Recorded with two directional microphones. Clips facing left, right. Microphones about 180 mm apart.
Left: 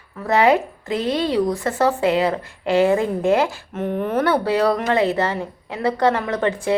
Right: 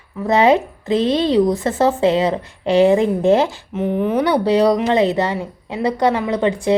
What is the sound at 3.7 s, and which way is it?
Speech, 10° right (ahead or behind).